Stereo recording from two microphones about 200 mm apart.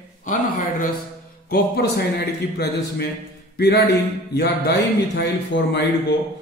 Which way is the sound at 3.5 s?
60° left (ahead or behind).